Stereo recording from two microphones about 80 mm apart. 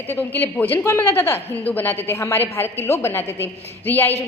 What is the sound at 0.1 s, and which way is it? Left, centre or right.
A woman's voice, left.